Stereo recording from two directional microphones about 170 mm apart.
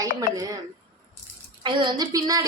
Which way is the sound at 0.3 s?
20° right (ahead or behind).